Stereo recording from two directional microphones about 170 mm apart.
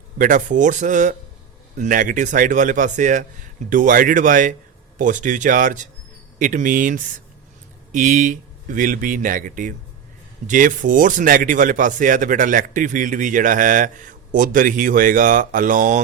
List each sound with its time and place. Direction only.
0.2 s speech: 50° right (ahead or behind)